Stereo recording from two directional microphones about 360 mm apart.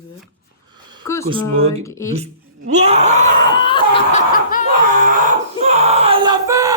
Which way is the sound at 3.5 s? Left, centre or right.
Centre.